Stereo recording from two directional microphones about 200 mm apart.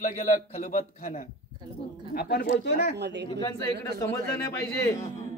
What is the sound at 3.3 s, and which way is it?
Speech, 20° left (ahead or behind).